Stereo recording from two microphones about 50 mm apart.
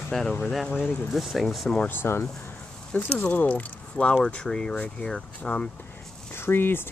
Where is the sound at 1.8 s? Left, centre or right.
Left.